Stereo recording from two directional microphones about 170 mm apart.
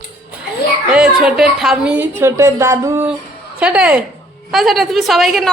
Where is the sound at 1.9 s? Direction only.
15° right (ahead or behind).